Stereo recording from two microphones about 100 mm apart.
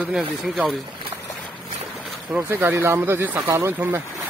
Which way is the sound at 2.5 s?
20° right (ahead or behind).